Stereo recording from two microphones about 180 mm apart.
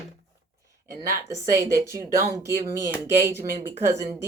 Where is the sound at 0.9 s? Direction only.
15° right (ahead or behind).